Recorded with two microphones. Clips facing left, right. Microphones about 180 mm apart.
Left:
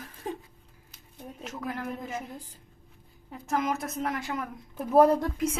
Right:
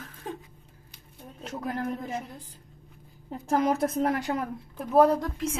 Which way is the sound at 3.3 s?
35° right (ahead or behind).